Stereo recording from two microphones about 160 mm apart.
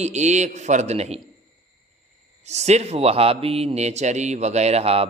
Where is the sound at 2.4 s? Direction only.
45° right (ahead or behind).